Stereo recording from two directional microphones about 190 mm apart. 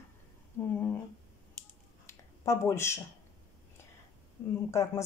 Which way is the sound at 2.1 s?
15° left (ahead or behind).